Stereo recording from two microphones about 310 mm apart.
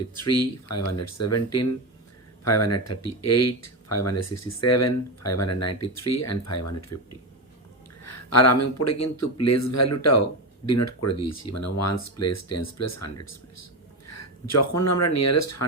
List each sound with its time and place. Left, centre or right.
0.2 s speech: left
14.1 s a sound: left
15.0 s speech: left